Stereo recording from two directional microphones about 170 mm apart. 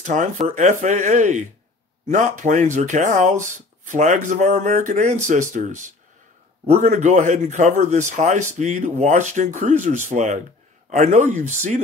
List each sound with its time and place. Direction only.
0.0 s speech: 45° right (ahead or behind)